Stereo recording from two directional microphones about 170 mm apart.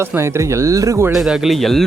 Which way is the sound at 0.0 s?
15° right (ahead or behind).